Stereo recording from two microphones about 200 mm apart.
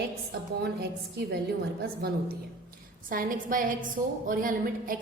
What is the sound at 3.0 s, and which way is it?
A woman's voice, 45° right (ahead or behind).